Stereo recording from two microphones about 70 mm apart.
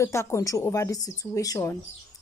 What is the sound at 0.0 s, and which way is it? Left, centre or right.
A woman's voice, left.